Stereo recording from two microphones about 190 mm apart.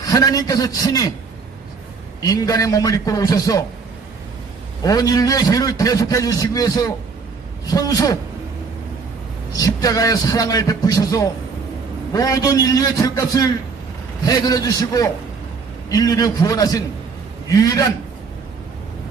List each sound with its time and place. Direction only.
0.0 s a man's voice: 20° left (ahead or behind)
2.2 s a man's voice: 20° left (ahead or behind)
4.8 s a man's voice: 20° left (ahead or behind)
9.6 s a man's voice: 20° left (ahead or behind)